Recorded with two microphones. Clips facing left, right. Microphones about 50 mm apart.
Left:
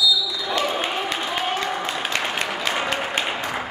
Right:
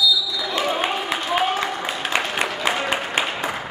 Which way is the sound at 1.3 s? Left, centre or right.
Centre.